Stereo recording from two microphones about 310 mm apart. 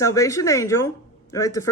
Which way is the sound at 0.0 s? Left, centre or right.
Centre.